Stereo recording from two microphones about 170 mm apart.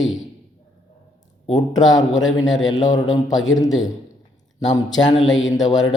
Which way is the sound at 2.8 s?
20° left (ahead or behind).